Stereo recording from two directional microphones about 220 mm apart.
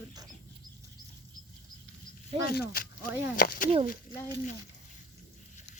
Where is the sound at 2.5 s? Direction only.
45° left (ahead or behind).